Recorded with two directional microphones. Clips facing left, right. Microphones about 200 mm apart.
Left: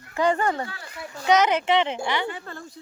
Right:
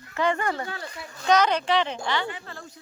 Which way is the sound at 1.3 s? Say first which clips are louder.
Left 2 dB; 20° left (ahead or behind).